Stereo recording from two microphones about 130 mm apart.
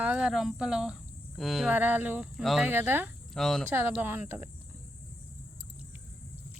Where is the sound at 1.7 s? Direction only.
15° right (ahead or behind).